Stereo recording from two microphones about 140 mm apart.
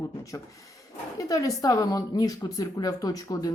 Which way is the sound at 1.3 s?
25° left (ahead or behind).